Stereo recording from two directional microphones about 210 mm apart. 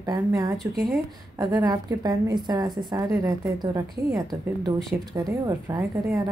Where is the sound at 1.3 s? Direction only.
15° right (ahead or behind).